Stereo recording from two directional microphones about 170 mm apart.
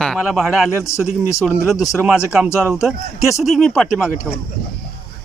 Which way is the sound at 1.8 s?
15° left (ahead or behind).